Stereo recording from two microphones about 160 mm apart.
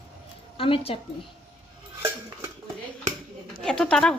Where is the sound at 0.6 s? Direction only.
35° left (ahead or behind).